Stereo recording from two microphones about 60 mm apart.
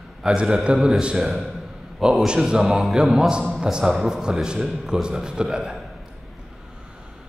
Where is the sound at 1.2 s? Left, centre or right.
Centre.